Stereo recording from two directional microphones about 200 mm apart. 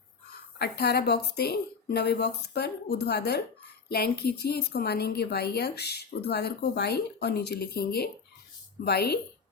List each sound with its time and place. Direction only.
0.6 s a woman's voice: 55° left (ahead or behind)